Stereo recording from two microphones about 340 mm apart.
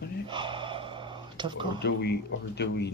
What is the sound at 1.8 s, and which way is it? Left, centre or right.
Speech, left.